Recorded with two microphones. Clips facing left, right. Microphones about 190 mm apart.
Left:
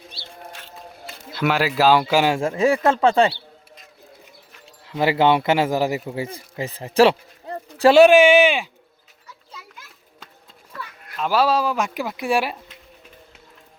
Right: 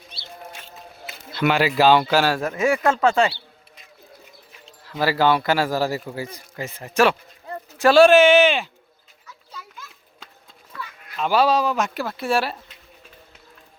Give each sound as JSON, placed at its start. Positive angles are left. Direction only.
{"t": 1.3, "sound": "a man's voice", "side_deg": 5}
{"t": 2.1, "sound": "a man's voice", "side_deg": 20}
{"t": 4.9, "sound": "a man's voice", "side_deg": 20}
{"t": 7.9, "sound": "speech", "side_deg": 15}
{"t": 11.2, "sound": "speech", "side_deg": 5}